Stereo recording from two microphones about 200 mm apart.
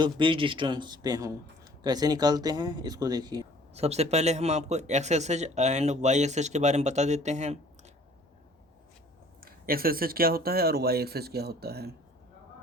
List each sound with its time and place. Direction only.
0.0 s speech: 25° right (ahead or behind)
3.8 s speech: 30° right (ahead or behind)
9.4 s speech: 45° right (ahead or behind)